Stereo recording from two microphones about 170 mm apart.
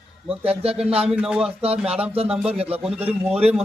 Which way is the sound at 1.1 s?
5° right (ahead or behind).